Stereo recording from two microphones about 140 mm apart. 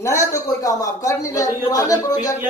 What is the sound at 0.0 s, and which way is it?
Speech, 20° left (ahead or behind).